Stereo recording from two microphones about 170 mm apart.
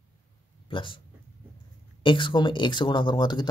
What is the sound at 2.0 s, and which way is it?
Speech, 30° left (ahead or behind).